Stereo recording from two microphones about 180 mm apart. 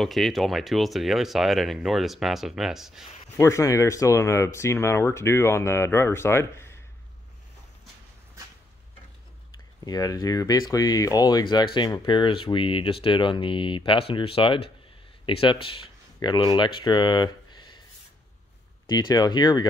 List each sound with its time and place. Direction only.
0.0 s speech: centre (ahead or behind)
3.3 s speech: 15° left (ahead or behind)
9.8 s speech: 20° left (ahead or behind)
18.9 s speech: 20° left (ahead or behind)